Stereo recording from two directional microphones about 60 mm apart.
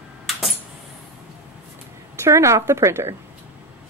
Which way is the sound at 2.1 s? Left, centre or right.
Right.